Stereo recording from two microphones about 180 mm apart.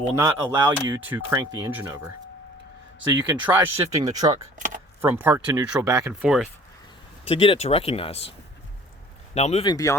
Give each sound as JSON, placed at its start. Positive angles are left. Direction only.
{"t": 0.2, "sound": "speech", "side_deg": -15}
{"t": 6.2, "sound": "speech", "side_deg": 0}
{"t": 7.3, "sound": "speech", "side_deg": 30}
{"t": 9.6, "sound": "speech", "side_deg": 20}